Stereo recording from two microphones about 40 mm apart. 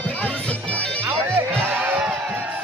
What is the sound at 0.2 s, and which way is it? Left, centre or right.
Bagpipes, left.